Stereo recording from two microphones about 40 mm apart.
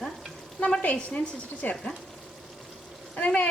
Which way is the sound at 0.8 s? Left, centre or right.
Left.